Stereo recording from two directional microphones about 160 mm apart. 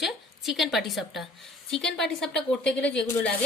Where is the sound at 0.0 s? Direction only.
Centre (ahead or behind).